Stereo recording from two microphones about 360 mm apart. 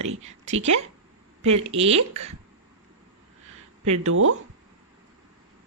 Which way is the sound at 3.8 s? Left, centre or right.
Right.